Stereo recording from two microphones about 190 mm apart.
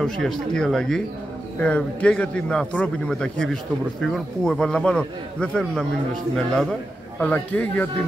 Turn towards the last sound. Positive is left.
turn(degrees=5)  # may be behind; listen again after turning